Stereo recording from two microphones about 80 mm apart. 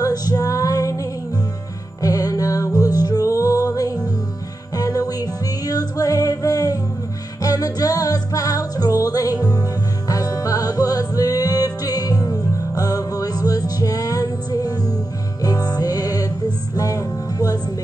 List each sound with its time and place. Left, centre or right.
0.0 s music: left